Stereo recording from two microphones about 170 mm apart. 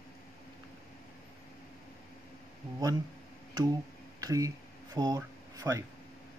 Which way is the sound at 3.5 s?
20° right (ahead or behind).